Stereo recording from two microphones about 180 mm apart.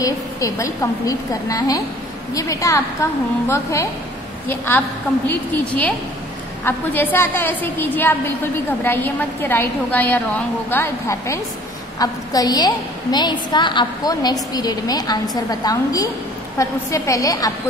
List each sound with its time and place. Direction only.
0.0 s a woman's voice: 20° left (ahead or behind)